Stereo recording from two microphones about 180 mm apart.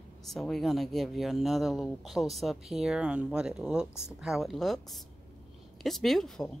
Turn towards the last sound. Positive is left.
turn(degrees=0)  # may be behind; listen again after turning